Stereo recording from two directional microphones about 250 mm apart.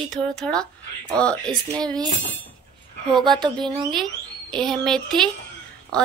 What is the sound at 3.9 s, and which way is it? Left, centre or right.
A woman's voice, centre.